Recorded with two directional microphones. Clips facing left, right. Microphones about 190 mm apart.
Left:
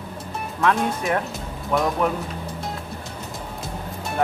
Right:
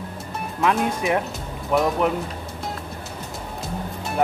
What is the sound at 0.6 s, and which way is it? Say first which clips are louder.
Speech: even; 10° right (ahead or behind).